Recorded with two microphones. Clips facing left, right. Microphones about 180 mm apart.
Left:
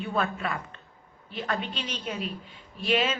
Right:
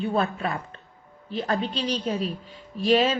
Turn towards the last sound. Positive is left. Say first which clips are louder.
# right 6 dB
turn(degrees=-35)  # may be behind; listen again after turning